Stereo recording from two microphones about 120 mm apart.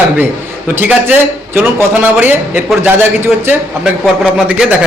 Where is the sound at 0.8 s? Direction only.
15° right (ahead or behind).